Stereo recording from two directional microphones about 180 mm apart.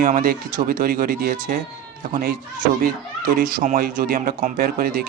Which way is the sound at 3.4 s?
50° right (ahead or behind).